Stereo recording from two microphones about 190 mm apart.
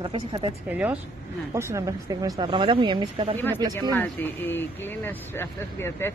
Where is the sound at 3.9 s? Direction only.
10° left (ahead or behind).